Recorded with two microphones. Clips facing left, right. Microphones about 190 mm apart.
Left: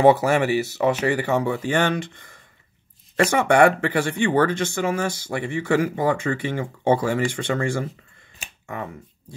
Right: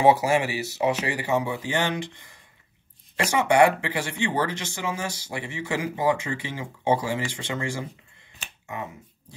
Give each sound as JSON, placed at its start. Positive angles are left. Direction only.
{"t": 0.0, "sound": "speech", "side_deg": 55}